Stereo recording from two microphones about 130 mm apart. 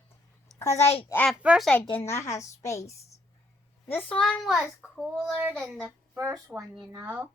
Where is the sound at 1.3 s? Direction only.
5° right (ahead or behind).